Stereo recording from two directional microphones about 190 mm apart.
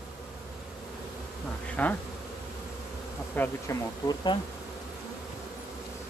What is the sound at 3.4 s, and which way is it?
Speech, 15° left (ahead or behind).